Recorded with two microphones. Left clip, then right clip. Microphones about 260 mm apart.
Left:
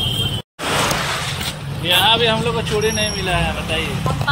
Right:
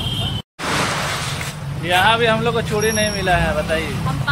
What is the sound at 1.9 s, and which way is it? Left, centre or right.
Speech, centre.